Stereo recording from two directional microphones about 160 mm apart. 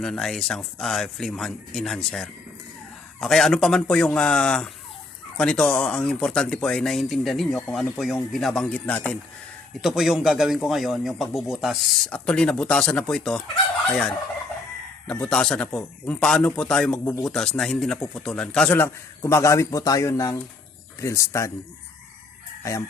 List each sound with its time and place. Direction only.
0.0 s speech: 5° left (ahead or behind)
15.0 s a man's voice: 10° left (ahead or behind)